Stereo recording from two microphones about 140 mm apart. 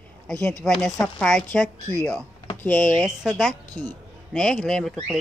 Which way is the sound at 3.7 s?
30° right (ahead or behind).